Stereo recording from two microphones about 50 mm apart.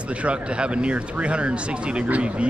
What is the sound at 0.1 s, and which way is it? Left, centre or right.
Speech, right.